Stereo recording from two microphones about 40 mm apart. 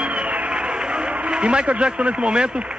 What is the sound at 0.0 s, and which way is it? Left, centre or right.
Music, right.